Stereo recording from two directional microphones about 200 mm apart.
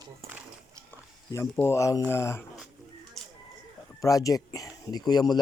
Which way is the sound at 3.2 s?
Centre (ahead or behind).